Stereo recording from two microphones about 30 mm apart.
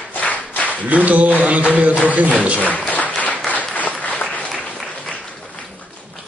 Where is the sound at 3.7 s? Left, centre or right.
Left.